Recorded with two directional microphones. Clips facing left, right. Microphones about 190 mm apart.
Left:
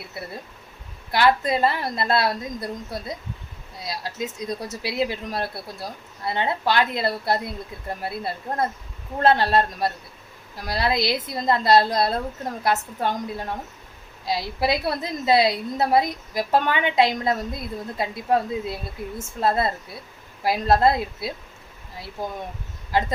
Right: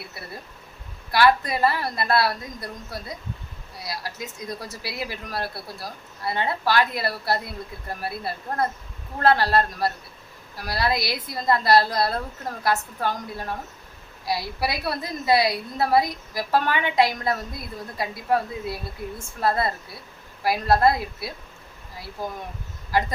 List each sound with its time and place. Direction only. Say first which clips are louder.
0.2 s a woman's voice: left 4 dB; 20° left (ahead or behind)